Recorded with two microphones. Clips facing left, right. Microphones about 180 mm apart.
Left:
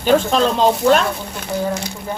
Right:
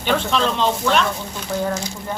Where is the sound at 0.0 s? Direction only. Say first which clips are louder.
Left 5 dB; 40° left (ahead or behind).